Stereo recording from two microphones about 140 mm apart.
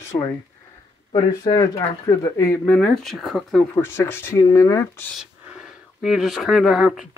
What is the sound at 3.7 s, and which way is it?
Speech, 15° left (ahead or behind).